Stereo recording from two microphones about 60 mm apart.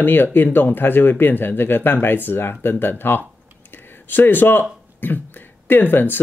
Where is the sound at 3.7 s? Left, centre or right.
Left.